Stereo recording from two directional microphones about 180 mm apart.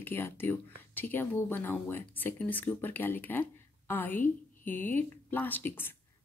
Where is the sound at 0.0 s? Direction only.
10° left (ahead or behind).